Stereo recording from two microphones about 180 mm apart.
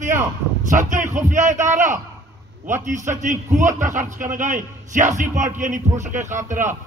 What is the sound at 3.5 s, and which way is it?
A man's voice, 45° right (ahead or behind).